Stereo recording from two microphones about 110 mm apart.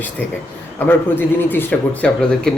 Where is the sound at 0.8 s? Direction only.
20° left (ahead or behind).